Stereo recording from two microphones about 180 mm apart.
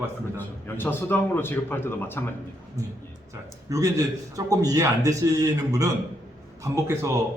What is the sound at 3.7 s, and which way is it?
A man's voice, 20° right (ahead or behind).